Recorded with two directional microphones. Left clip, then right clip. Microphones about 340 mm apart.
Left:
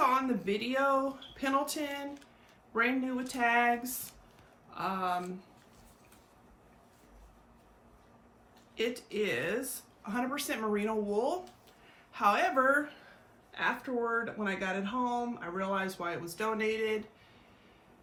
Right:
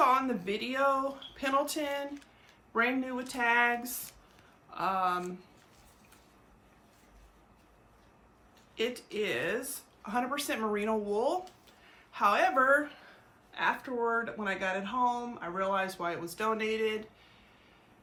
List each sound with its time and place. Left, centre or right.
0.0 s speech: centre
8.7 s speech: centre